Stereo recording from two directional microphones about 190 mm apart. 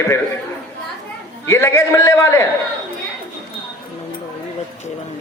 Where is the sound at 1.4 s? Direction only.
15° left (ahead or behind).